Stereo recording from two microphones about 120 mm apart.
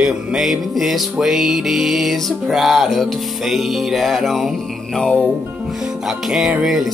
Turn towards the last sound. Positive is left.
turn(degrees=0)  # may be behind; listen again after turning